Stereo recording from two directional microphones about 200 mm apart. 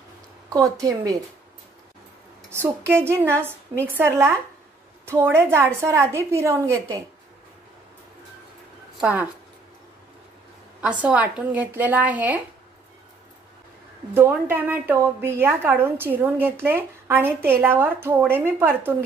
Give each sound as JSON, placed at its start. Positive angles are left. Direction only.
{"t": 0.5, "sound": "a woman's voice", "side_deg": -15}
{"t": 2.5, "sound": "a woman's voice", "side_deg": -10}
{"t": 9.0, "sound": "a woman's voice", "side_deg": -10}
{"t": 10.8, "sound": "a woman's voice", "side_deg": -5}
{"t": 14.1, "sound": "a woman's voice", "side_deg": -10}